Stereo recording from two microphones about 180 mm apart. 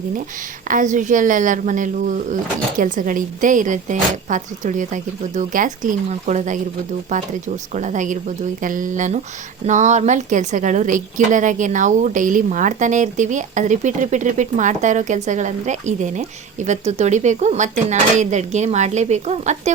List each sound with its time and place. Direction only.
0.7 s a woman's voice: 45° right (ahead or behind)
7.7 s a woman's voice: 40° right (ahead or behind)